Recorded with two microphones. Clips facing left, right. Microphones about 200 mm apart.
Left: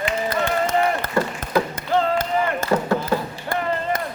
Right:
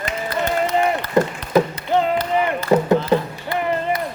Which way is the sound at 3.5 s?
50° left (ahead or behind).